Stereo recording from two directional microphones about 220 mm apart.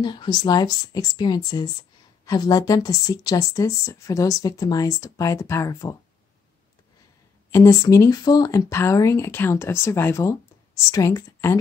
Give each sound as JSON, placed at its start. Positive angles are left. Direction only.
{"t": 0.0, "sound": "speech", "side_deg": 20}
{"t": 7.5, "sound": "speech", "side_deg": 15}